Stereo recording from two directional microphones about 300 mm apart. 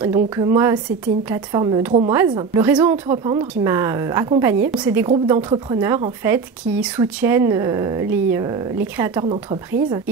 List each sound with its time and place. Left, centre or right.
0.0 s speech: centre